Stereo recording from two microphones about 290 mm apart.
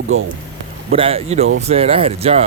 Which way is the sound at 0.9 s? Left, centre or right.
Centre.